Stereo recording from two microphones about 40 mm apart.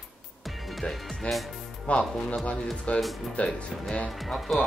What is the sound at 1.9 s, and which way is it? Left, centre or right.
Speech, left.